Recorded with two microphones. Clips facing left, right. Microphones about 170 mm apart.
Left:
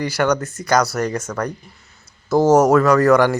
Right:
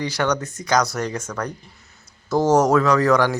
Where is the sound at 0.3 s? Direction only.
15° right (ahead or behind).